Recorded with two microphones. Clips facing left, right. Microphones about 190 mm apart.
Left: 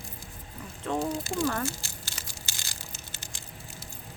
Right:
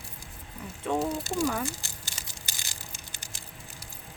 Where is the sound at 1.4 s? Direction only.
10° right (ahead or behind).